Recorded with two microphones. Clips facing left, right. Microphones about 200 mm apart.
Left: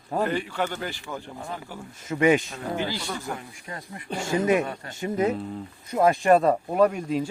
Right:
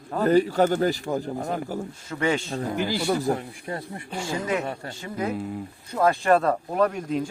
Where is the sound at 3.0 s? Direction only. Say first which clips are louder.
Right 9 dB; 35° right (ahead or behind).